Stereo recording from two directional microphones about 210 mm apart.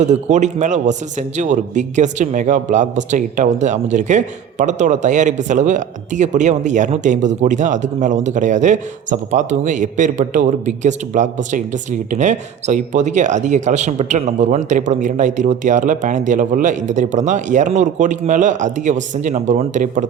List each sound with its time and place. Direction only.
0.0 s speech: 35° right (ahead or behind)